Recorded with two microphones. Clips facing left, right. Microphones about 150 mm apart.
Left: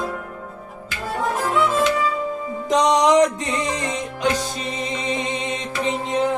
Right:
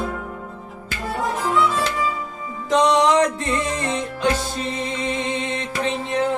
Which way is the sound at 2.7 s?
15° left (ahead or behind).